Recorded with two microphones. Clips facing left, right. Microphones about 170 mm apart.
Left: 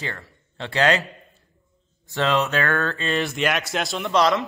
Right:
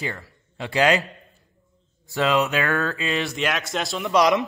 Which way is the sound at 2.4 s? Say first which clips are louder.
Even; 15° right (ahead or behind).